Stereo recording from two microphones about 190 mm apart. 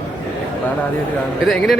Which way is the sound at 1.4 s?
5° left (ahead or behind).